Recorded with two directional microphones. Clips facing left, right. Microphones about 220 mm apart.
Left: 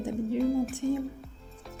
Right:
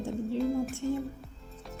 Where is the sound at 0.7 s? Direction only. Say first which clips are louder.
Left 3 dB; 15° left (ahead or behind).